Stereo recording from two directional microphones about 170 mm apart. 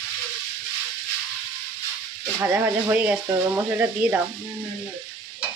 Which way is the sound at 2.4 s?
10° right (ahead or behind).